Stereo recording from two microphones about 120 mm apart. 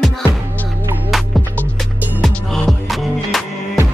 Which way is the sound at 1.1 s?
Centre (ahead or behind).